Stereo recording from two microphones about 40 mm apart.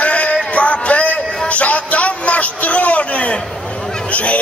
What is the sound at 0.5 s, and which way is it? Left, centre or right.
Music, left.